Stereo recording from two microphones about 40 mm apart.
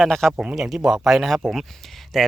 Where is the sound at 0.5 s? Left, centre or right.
Centre.